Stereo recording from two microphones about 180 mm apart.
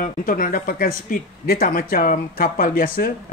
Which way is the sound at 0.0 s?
50° left (ahead or behind).